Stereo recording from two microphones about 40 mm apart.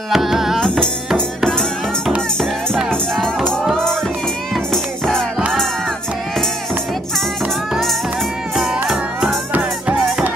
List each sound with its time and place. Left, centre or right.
0.1 s music: centre
0.7 s music: left
3.7 s music: centre
8.8 s music: centre